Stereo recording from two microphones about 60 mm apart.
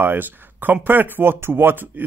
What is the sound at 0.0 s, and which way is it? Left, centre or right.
Speech, right.